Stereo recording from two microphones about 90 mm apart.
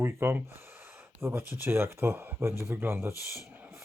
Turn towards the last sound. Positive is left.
turn(degrees=-25)  # may be behind; listen again after turning